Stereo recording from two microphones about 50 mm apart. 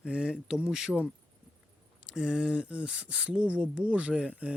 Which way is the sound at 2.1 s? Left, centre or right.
Centre.